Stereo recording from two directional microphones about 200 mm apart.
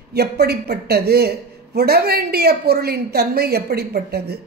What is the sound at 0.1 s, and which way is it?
A woman's voice, 55° right (ahead or behind).